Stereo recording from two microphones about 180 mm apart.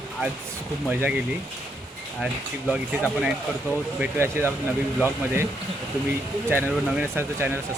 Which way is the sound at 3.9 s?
10° right (ahead or behind).